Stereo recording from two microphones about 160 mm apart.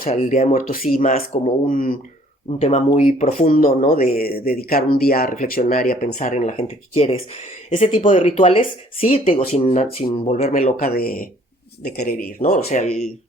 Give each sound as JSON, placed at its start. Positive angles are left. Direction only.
{"t": 0.1, "sound": "speech", "side_deg": 50}
{"t": 2.6, "sound": "speech", "side_deg": 40}
{"t": 3.6, "sound": "speech", "side_deg": 60}
{"t": 10.5, "sound": "speech", "side_deg": 55}
{"t": 12.4, "sound": "speech", "side_deg": 45}